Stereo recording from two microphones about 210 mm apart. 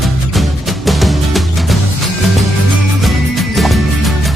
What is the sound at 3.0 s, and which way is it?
Music, centre (ahead or behind).